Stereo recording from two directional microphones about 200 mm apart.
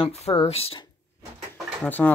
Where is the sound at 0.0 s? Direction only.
30° left (ahead or behind).